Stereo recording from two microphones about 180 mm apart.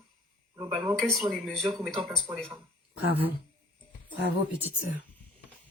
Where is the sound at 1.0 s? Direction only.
Centre (ahead or behind).